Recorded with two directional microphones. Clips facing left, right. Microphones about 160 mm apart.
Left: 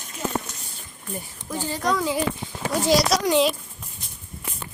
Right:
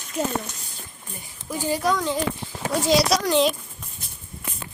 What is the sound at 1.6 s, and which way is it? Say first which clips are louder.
Speech: right 3 dB; 10° right (ahead or behind).